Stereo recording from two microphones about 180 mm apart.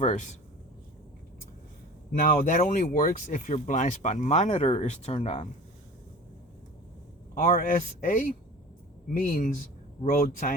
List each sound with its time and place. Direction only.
0.0 s speech: 40° left (ahead or behind)
2.1 s speech: 50° left (ahead or behind)
7.3 s speech: 50° left (ahead or behind)